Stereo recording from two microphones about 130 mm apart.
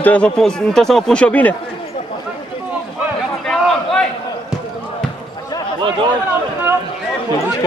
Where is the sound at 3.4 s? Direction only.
5° left (ahead or behind).